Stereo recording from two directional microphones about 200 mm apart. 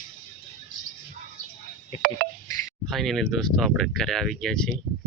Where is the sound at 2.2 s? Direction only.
50° right (ahead or behind).